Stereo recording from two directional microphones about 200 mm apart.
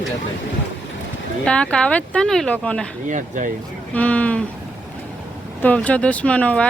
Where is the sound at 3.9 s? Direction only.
5° left (ahead or behind).